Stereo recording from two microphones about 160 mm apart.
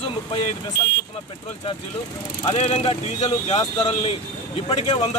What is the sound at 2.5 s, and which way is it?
Speech, 40° left (ahead or behind).